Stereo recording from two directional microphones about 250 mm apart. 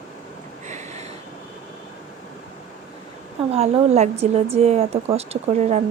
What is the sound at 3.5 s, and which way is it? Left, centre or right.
A woman's voice, right.